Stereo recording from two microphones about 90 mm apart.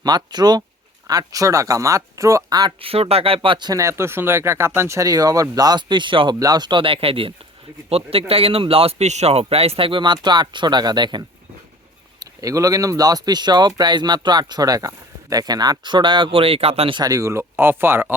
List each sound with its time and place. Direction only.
0.0 s speech: 50° right (ahead or behind); by 2.4 s 35° right (ahead or behind)
2.5 s speech: 50° right (ahead or behind)
2.8 s speech: 90° right; by 3.7 s 70° right (ahead or behind)
3.7 s speech: 35° right (ahead or behind); by 6.3 s 65° right (ahead or behind)
6.4 s speech: 50° right (ahead or behind)
12.2 s speech: 40° right (ahead or behind); by 17.0 s 90° right
17.0 s speech: 40° right (ahead or behind)
17.6 s speech: 25° right (ahead or behind)